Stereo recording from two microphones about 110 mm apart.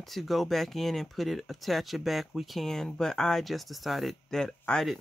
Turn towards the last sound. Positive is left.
turn(degrees=5)  # may be behind; listen again after turning